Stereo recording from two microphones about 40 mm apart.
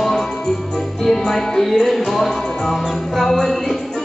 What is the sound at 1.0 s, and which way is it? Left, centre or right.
Music, centre.